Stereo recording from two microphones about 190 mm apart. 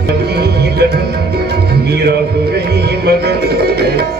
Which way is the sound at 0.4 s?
60° right (ahead or behind).